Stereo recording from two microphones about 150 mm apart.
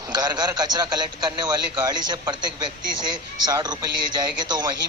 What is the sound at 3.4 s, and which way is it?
Speech, 30° right (ahead or behind).